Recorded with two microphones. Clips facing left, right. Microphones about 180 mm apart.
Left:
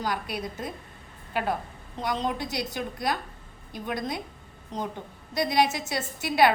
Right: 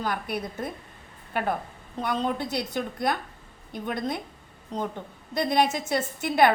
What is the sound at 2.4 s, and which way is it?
A woman's voice, 55° right (ahead or behind).